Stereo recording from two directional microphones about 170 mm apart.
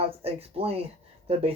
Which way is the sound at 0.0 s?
35° right (ahead or behind).